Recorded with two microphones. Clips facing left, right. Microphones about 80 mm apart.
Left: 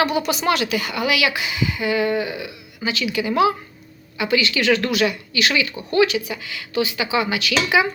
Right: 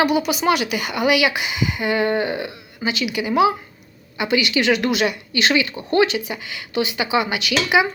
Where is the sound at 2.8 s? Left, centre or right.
Centre.